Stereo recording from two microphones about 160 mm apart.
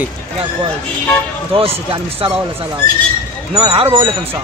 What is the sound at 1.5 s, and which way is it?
Speech, 35° right (ahead or behind).